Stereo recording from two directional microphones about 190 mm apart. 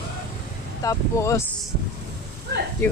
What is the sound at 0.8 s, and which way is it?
Speech, 15° left (ahead or behind).